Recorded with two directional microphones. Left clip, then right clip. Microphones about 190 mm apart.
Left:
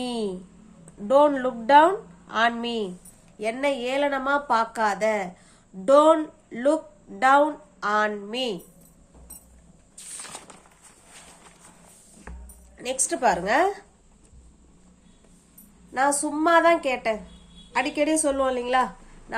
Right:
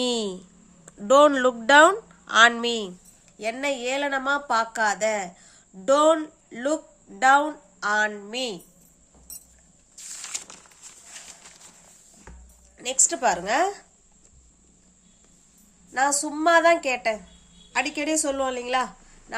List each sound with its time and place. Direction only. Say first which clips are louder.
0.0 s a sound: right 3 dB; 35° right (ahead or behind)
1.0 s a woman's voice: right 2 dB; 40° right (ahead or behind)
3.3 s speech: left 2 dB; 20° right (ahead or behind)
12.7 s speech: right 2 dB; 10° right (ahead or behind)
15.9 s a woman's voice: even; 15° right (ahead or behind)